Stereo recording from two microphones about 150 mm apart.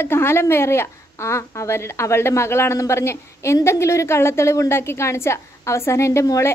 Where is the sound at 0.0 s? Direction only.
15° left (ahead or behind).